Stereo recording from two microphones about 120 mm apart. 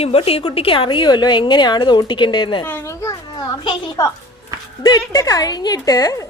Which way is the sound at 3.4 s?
40° left (ahead or behind).